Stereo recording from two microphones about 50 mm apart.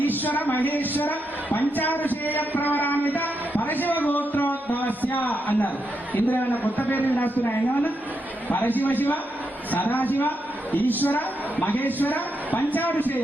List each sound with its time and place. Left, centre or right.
0.3 s speech: left